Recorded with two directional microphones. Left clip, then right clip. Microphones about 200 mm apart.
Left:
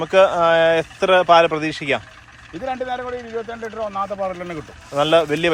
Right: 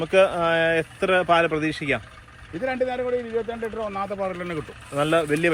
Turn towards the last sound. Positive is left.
turn(degrees=15)  # may be behind; listen again after turning